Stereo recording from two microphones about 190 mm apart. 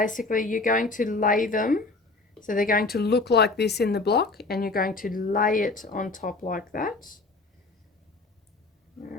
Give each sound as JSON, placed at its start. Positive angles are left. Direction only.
{"t": 0.0, "sound": "speech", "side_deg": 45}